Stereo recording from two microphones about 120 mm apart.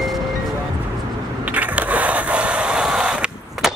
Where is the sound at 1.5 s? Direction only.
10° right (ahead or behind).